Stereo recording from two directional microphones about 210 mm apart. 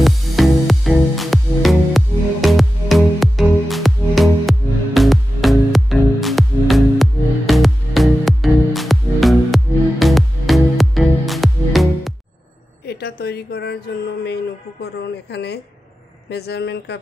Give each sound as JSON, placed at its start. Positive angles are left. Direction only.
{"t": 0.0, "sound": "music", "side_deg": 0}
{"t": 12.8, "sound": "a sound", "side_deg": 50}
{"t": 16.3, "sound": "speech", "side_deg": 50}